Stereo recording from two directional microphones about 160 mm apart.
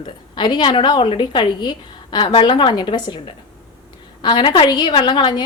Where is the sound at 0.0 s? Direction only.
30° left (ahead or behind).